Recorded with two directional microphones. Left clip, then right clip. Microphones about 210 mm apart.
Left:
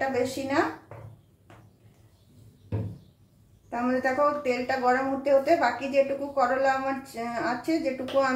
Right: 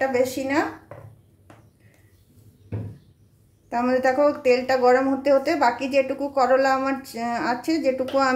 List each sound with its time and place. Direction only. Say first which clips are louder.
0.1 s speech: right 5 dB; 60° right (ahead or behind)
3.6 s speech: right 6 dB; 55° right (ahead or behind)